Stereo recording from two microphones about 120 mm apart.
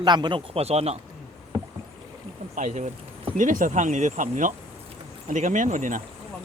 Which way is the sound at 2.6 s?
90° right.